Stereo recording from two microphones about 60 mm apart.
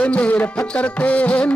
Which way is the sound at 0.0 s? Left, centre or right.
Left.